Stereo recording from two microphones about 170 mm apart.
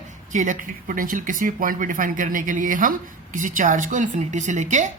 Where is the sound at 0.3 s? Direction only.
50° right (ahead or behind).